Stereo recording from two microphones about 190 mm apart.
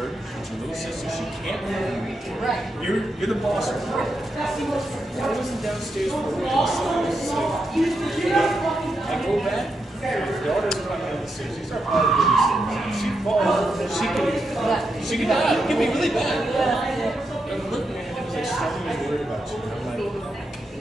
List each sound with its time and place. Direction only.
1.5 s a man's voice: centre (ahead or behind)
3.2 s a man's voice: centre (ahead or behind)
11.9 s a man's voice: centre (ahead or behind)
18.3 s a sound: centre (ahead or behind)